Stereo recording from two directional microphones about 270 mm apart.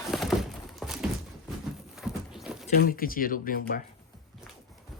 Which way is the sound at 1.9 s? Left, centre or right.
Centre.